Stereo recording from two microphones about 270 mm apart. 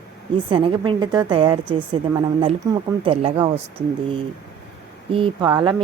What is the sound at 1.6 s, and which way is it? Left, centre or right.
Speech, centre.